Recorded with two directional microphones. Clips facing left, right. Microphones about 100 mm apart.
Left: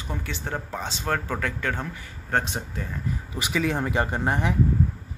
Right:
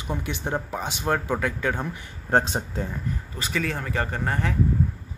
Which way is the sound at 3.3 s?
10° left (ahead or behind).